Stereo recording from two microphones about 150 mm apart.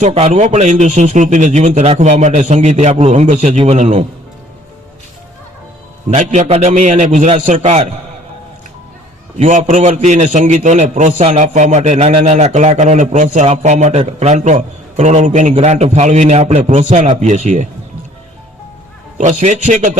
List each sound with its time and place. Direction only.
0.0 s a man's voice: 45° right (ahead or behind)
6.1 s a man's voice: 55° right (ahead or behind)
9.4 s a man's voice: 55° right (ahead or behind)
19.1 s a man's voice: 55° right (ahead or behind)